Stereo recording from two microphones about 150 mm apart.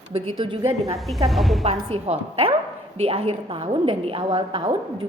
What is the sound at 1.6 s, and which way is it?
A woman's voice, 45° right (ahead or behind).